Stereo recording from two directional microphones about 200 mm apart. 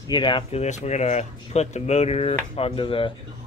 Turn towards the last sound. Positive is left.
turn(degrees=25)  # may be behind; listen again after turning